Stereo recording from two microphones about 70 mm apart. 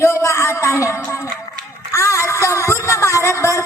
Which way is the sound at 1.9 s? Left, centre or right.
Left.